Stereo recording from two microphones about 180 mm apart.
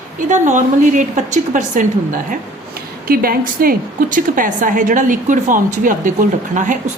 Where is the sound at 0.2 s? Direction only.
45° right (ahead or behind).